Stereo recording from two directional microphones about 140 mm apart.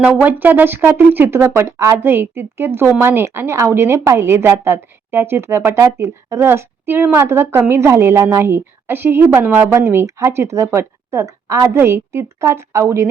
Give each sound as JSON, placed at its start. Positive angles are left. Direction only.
{"t": 0.0, "sound": "speech", "side_deg": -10}